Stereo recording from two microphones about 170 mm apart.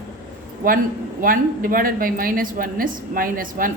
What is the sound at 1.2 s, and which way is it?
A woman's voice, 55° right (ahead or behind).